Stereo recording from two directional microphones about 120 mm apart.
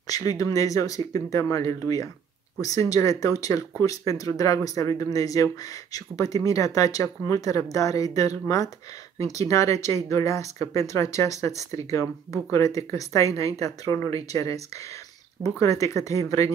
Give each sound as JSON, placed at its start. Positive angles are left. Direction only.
{"t": 0.0, "sound": "speech", "side_deg": 30}